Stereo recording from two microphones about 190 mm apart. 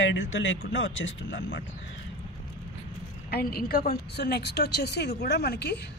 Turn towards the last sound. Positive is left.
turn(degrees=60)  # may be behind; listen again after turning